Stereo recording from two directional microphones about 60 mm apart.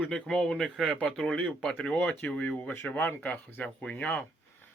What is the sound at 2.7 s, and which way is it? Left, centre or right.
Speech, left.